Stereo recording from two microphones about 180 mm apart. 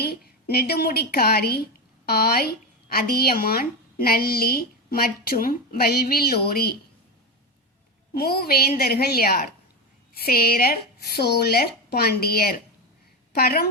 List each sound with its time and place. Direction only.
0.0 s a woman's voice: 60° left (ahead or behind)
8.1 s a woman's voice: 60° left (ahead or behind)